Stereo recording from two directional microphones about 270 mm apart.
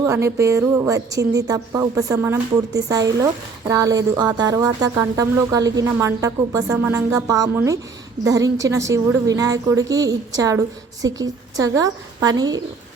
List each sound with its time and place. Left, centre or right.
0.0 s speech: centre